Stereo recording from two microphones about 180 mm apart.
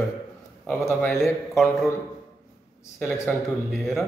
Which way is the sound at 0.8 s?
15° left (ahead or behind).